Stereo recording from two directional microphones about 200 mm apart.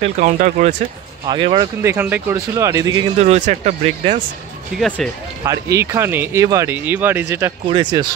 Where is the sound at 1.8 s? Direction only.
10° right (ahead or behind).